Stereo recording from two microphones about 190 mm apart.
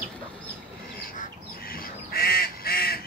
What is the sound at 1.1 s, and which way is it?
Goose, 50° left (ahead or behind).